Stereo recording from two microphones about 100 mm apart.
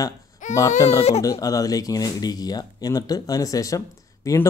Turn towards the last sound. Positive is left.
turn(degrees=35)  # may be behind; listen again after turning